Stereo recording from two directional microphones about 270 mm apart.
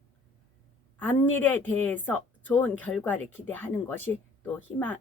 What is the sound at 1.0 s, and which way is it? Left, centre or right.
Speech, centre.